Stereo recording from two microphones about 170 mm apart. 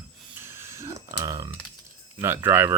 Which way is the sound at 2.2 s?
15° right (ahead or behind).